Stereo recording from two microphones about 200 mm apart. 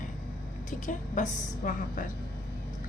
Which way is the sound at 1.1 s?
40° left (ahead or behind).